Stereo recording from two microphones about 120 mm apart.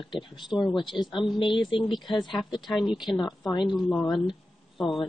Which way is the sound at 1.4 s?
45° left (ahead or behind).